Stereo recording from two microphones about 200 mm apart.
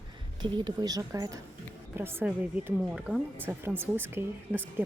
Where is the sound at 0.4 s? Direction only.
25° right (ahead or behind).